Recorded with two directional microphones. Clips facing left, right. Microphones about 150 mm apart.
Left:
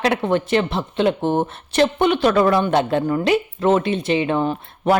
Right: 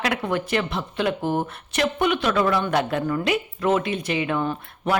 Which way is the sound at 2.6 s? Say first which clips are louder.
Left 4 dB; 25° left (ahead or behind).